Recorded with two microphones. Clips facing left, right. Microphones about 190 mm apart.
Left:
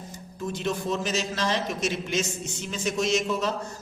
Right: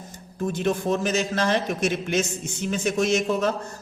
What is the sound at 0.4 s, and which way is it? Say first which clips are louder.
A man's voice: right 5 dB; 55° right (ahead or behind).